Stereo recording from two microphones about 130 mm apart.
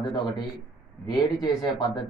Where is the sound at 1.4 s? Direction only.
35° left (ahead or behind).